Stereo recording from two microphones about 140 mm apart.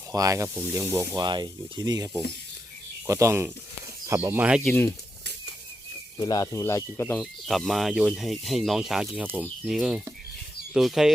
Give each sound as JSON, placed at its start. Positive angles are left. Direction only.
{"t": 0.1, "sound": "speech", "side_deg": -25}
{"t": 1.3, "sound": "speech", "side_deg": -30}
{"t": 6.1, "sound": "speech", "side_deg": 30}
{"t": 7.2, "sound": "speech", "side_deg": 0}